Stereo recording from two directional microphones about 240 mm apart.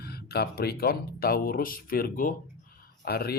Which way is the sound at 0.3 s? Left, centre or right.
Left.